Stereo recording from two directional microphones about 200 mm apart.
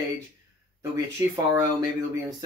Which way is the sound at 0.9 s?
15° right (ahead or behind).